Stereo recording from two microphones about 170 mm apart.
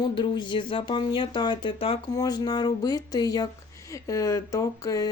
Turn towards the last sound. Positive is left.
turn(degrees=20)  # may be behind; listen again after turning